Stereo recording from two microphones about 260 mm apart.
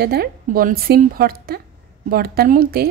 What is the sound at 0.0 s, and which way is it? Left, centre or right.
A woman's voice, right.